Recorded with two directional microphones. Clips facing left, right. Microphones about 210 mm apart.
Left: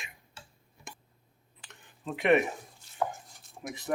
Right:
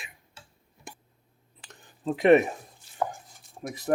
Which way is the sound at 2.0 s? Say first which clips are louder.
Right 6 dB; 35° right (ahead or behind).